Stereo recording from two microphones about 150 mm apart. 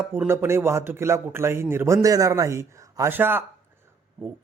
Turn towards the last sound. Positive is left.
turn(degrees=-15)  # may be behind; listen again after turning